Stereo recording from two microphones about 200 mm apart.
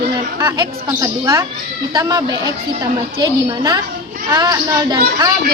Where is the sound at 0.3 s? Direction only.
15° right (ahead or behind).